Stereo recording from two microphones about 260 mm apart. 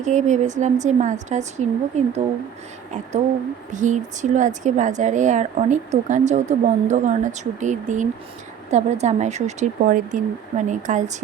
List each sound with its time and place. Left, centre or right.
0.0 s a woman's voice: right
3.7 s a woman's voice: right